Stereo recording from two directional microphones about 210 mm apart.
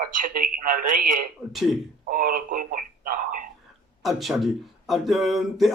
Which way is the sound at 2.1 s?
40° right (ahead or behind).